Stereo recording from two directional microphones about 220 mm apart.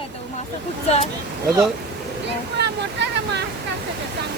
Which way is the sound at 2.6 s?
50° right (ahead or behind).